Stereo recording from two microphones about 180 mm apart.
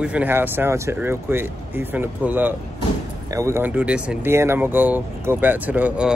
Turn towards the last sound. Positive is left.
turn(degrees=-5)  # may be behind; listen again after turning